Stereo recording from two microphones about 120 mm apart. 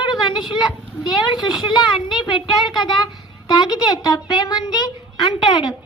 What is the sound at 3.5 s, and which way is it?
A child's voice, 35° left (ahead or behind).